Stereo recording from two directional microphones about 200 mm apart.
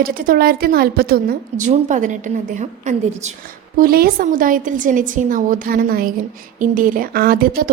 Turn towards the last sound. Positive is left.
turn(degrees=-45)  # may be behind; listen again after turning